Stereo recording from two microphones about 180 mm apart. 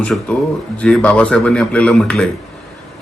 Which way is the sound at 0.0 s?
5° left (ahead or behind).